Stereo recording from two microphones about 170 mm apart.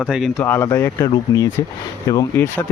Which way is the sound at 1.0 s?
20° left (ahead or behind).